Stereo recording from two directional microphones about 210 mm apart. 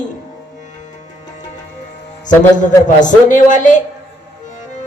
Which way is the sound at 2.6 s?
35° left (ahead or behind).